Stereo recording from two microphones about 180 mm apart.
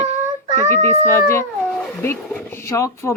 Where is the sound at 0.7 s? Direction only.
15° left (ahead or behind).